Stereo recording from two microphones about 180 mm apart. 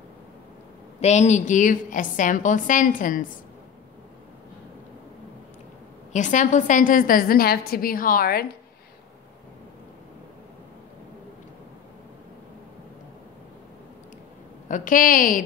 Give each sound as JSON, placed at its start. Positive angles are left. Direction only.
{"t": 1.0, "sound": "a woman's voice", "side_deg": 40}
{"t": 6.1, "sound": "a woman's voice", "side_deg": 45}
{"t": 14.7, "sound": "a woman's voice", "side_deg": 50}